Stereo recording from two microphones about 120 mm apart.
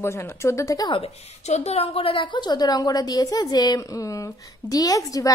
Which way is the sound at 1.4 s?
65° left (ahead or behind).